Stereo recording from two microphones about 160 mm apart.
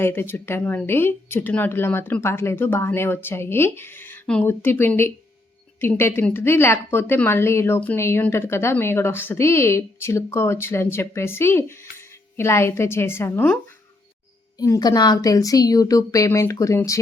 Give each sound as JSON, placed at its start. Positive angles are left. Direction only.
{"t": 0.0, "sound": "speech", "side_deg": 15}
{"t": 14.6, "sound": "a woman's voice", "side_deg": 25}